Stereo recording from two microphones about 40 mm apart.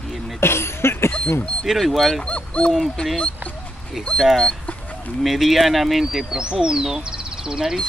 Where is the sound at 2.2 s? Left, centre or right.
Left.